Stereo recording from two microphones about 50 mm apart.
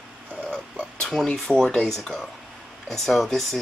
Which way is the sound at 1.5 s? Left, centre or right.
Centre.